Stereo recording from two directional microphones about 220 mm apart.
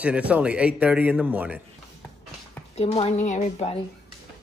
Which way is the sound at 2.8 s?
30° left (ahead or behind).